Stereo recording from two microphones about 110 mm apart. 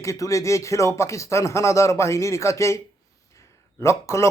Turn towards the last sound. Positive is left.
turn(degrees=25)  # may be behind; listen again after turning